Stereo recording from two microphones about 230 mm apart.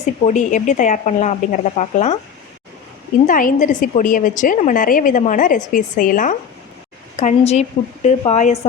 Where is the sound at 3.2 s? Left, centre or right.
Left.